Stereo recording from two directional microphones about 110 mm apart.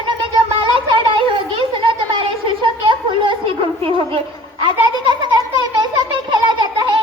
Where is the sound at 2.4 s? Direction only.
50° right (ahead or behind).